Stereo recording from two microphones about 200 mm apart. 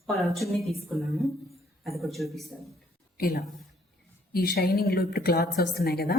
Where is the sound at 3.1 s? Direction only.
50° left (ahead or behind).